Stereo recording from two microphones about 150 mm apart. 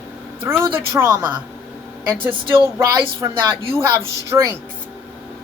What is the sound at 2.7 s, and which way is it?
A man's voice, 15° right (ahead or behind).